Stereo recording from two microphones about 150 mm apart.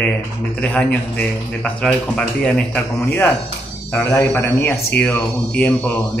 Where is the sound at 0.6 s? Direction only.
10° left (ahead or behind).